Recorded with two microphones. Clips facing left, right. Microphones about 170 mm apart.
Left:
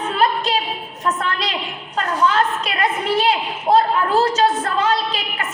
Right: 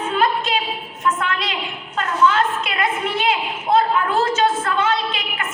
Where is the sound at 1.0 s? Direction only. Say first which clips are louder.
Even; 35° left (ahead or behind).